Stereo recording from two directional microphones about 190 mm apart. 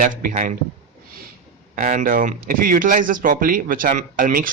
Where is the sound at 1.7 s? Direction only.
45° right (ahead or behind).